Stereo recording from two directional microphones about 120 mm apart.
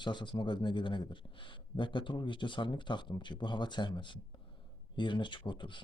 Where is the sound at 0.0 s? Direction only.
40° left (ahead or behind).